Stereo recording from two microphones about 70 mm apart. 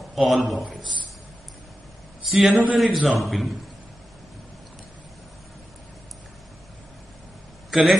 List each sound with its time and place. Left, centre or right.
0.1 s a man's voice: centre
2.2 s a man's voice: centre
2.5 s a man's voice: centre
2.8 s a man's voice: centre
7.7 s a man's voice: centre